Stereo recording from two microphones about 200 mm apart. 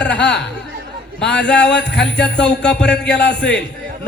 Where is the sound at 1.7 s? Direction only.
60° left (ahead or behind).